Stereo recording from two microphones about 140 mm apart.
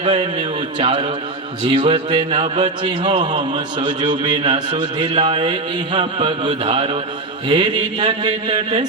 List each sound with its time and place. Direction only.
0.1 s a man's voice: 35° right (ahead or behind)
2.8 s a man's voice: 35° right (ahead or behind)